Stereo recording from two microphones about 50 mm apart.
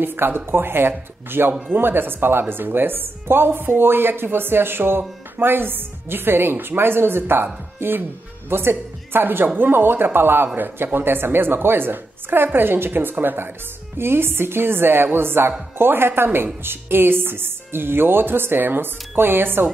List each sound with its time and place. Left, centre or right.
0.0 s speech: right
13.9 s speech: right